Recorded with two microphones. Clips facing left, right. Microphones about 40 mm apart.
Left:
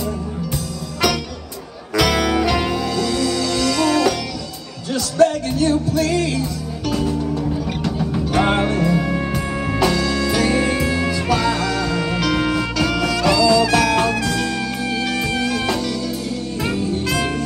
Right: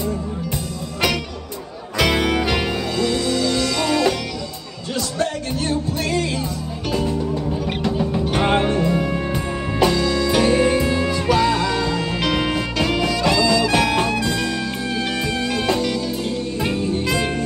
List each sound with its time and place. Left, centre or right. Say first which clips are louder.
2.0 s music: left 1 dB; right
2.5 s music: left 2 dB; right
8.5 s music: even; right
11.9 s music: left 1 dB; centre
14.2 s music: left 1 dB; right